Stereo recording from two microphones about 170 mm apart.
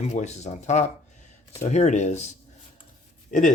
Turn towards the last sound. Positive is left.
turn(degrees=50)  # may be behind; listen again after turning